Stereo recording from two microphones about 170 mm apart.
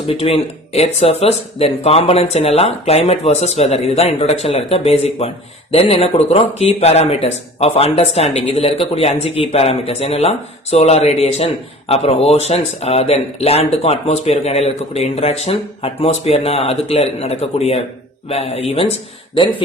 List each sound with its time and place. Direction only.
0.1 s speech: 35° left (ahead or behind)